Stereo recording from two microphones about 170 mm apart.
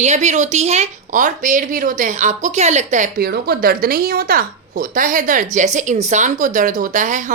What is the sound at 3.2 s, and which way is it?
A woman's voice, 70° right (ahead or behind).